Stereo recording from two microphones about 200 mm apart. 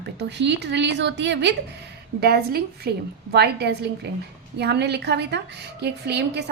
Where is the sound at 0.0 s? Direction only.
60° right (ahead or behind).